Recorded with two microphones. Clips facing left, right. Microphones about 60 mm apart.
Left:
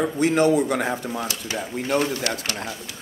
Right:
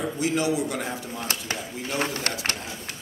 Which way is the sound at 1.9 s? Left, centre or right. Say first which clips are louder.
Left 5 dB; right.